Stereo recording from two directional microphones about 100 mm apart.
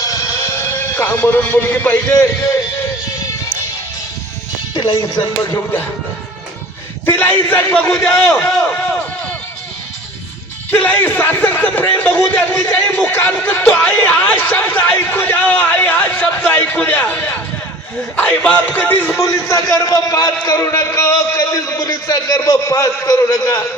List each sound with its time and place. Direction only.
0.0 s music: 35° left (ahead or behind)
1.4 s a man's voice: 15° left (ahead or behind)
4.7 s music: 50° left (ahead or behind)
7.0 s a man's voice: 20° left (ahead or behind)
8.6 s a sound: 15° left (ahead or behind)
10.7 s a man's voice: 15° left (ahead or behind)
19.1 s a man's voice: 30° left (ahead or behind)